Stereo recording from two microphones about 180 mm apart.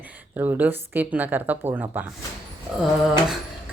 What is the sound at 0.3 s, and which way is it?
Speech, 10° right (ahead or behind).